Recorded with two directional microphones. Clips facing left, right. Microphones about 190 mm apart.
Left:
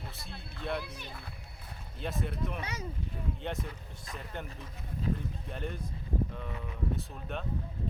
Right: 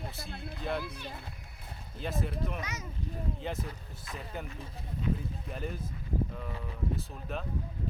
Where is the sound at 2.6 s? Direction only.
30° left (ahead or behind).